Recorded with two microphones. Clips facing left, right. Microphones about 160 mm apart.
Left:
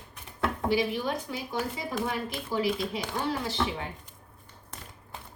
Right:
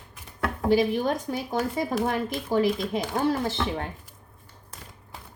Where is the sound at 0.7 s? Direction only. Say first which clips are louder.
Right 7 dB; 45° right (ahead or behind).